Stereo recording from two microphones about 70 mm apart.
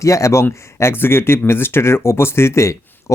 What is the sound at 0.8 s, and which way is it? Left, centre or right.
Speech, left.